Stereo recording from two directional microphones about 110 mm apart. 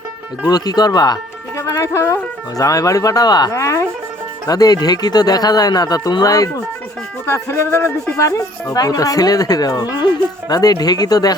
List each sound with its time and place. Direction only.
0.4 s speech: 35° left (ahead or behind); by 8.7 s 15° left (ahead or behind)
8.7 s speech: 35° left (ahead or behind)